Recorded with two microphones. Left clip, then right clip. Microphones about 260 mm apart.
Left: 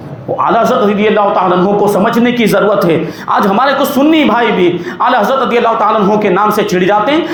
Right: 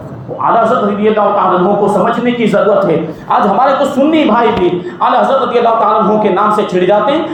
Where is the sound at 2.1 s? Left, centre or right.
Left.